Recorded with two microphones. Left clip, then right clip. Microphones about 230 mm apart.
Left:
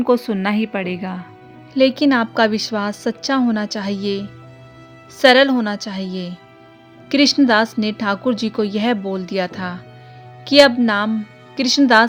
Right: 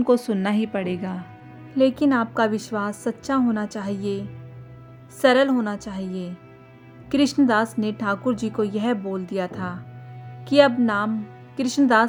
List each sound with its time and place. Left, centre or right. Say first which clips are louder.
0.0 s a woman's voice: left 3 dB; left
7.1 s a woman's voice: left 6 dB; left